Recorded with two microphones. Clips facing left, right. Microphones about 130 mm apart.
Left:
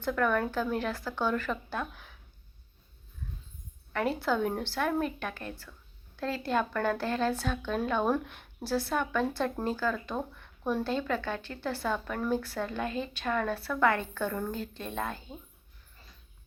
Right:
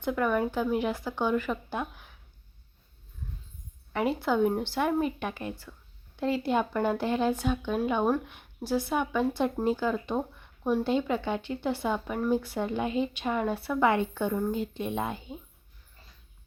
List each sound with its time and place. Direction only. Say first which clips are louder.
0.0 s speech: right 1 dB; 10° right (ahead or behind)
4.2 s a woman's voice: right 4 dB; 15° right (ahead or behind)